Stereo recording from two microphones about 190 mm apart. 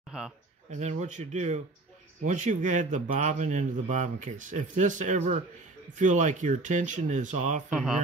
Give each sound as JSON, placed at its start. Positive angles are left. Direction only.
{"t": 0.7, "sound": "speech", "side_deg": -40}
{"t": 7.7, "sound": "speech", "side_deg": -5}